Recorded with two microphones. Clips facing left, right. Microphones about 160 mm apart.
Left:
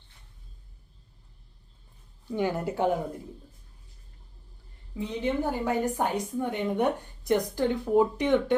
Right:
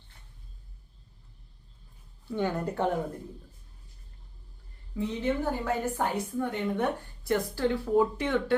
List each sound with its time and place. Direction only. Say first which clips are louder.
2.2 s a woman's voice: left 1 dB; 10° left (ahead or behind)
4.9 s a woman's voice: even; 15° left (ahead or behind)